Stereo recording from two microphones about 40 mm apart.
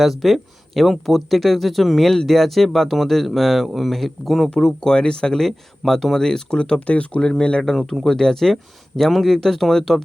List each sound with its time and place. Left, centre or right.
0.0 s speech: centre
4.6 s speech: centre
5.4 s speech: centre
6.7 s speech: left
7.2 s speech: left
7.6 s speech: centre